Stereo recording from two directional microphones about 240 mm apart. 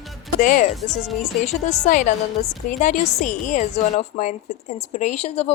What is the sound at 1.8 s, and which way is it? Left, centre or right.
A woman's voice, left.